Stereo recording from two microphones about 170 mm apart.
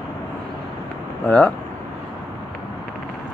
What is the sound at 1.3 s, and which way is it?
Speech, 5° left (ahead or behind).